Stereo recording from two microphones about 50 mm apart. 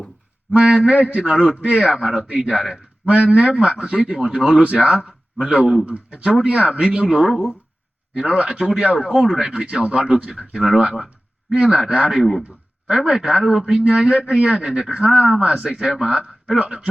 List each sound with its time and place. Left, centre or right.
0.5 s a man's voice: right
3.2 s a man's voice: centre
9.5 s a man's voice: right
12.1 s speech: centre
12.9 s a man's voice: centre